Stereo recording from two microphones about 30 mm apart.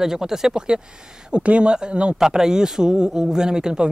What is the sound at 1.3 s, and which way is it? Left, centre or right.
Speech, right.